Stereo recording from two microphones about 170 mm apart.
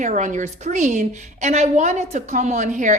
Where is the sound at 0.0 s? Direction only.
45° right (ahead or behind).